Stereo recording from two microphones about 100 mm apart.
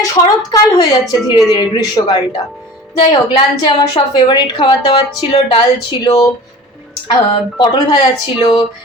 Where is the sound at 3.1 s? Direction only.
55° left (ahead or behind).